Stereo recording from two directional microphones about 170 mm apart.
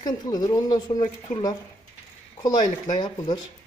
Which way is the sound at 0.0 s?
25° left (ahead or behind).